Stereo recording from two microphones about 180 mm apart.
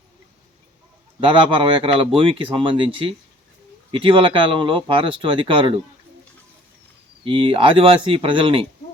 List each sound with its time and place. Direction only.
1.2 s speech: 30° right (ahead or behind)
7.3 s speech: 30° right (ahead or behind)